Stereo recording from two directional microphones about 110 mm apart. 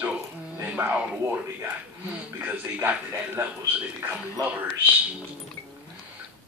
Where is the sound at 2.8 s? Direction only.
20° right (ahead or behind).